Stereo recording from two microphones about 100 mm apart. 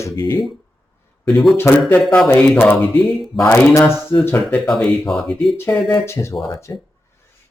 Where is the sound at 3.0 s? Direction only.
Centre (ahead or behind).